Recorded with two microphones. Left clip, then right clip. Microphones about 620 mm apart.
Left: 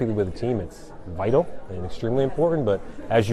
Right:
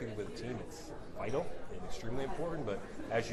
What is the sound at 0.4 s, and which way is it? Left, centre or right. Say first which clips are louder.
Speech: left 17 dB; left.